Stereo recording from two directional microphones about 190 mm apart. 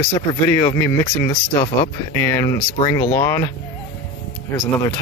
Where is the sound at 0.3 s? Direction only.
20° left (ahead or behind).